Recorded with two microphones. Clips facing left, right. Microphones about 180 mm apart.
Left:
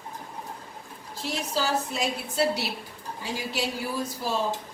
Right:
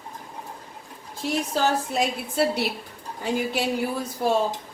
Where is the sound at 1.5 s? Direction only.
55° right (ahead or behind).